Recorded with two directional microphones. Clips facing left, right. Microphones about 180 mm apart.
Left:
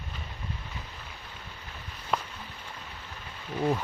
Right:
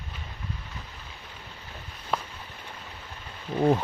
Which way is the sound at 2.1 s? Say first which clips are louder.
Even; centre (ahead or behind).